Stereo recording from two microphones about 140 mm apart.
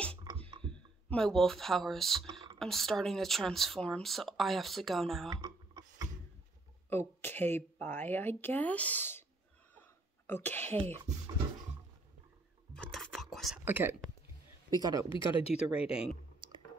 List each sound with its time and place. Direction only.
0.1 s a sound: 35° right (ahead or behind)
0.7 s speech: 5° left (ahead or behind)
5.3 s a sound: 30° right (ahead or behind)
6.9 s a woman's voice: 15° left (ahead or behind)
10.2 s a woman's voice: 15° left (ahead or behind)
12.7 s whispering: 5° left (ahead or behind)
13.7 s speech: 15° right (ahead or behind)
14.8 s speech: 25° right (ahead or behind)
15.0 s speech: 35° left (ahead or behind)
16.4 s music: 35° right (ahead or behind)